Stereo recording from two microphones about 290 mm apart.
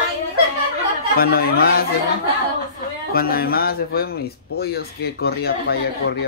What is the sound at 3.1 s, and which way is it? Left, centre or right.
Speech, left.